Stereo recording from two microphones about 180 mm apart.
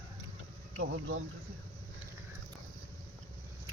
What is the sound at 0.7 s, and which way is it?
Speech, 90° right.